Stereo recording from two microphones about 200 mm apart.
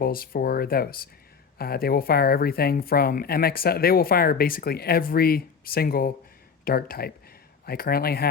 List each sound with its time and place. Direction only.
0.0 s speech: 45° left (ahead or behind)